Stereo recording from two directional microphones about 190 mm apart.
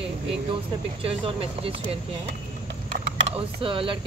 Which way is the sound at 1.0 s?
30° right (ahead or behind).